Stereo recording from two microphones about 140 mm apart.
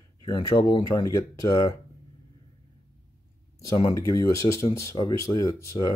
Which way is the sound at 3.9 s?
25° left (ahead or behind).